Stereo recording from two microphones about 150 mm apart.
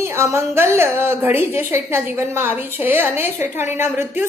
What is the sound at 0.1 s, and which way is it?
A woman's voice, 15° right (ahead or behind).